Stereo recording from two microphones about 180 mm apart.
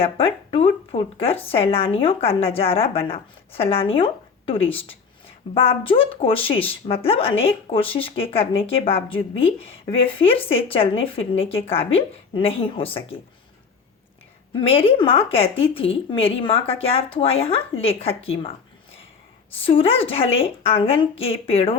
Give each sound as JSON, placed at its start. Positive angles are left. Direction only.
{"t": 0.0, "sound": "speech", "side_deg": 30}
{"t": 14.6, "sound": "speech", "side_deg": 30}
{"t": 19.5, "sound": "speech", "side_deg": 30}